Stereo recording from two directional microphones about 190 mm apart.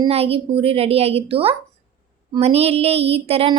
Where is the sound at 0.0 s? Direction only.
30° right (ahead or behind).